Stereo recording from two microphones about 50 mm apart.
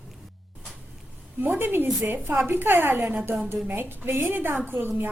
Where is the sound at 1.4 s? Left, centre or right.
Right.